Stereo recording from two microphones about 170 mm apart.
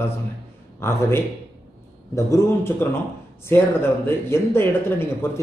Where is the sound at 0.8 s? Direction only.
15° left (ahead or behind).